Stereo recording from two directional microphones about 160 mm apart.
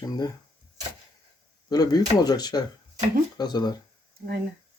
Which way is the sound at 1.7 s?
25° left (ahead or behind).